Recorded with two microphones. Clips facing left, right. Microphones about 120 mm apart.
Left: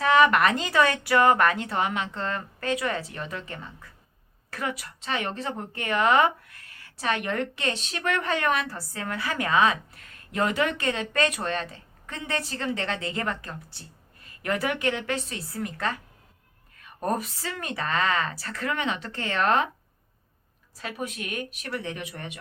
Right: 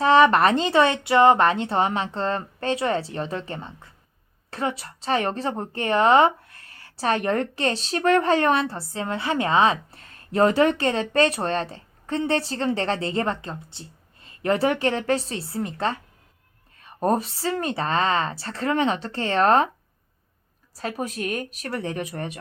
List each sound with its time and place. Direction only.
0.0 s a woman's voice: 30° right (ahead or behind)
20.7 s a woman's voice: 40° right (ahead or behind)